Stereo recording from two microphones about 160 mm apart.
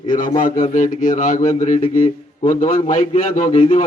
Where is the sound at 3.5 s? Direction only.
35° left (ahead or behind).